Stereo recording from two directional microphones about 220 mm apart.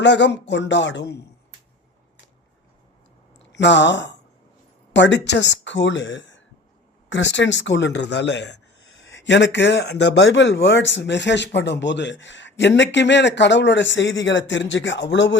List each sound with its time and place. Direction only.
0.0 s speech: 50° left (ahead or behind)
3.5 s speech: 55° left (ahead or behind)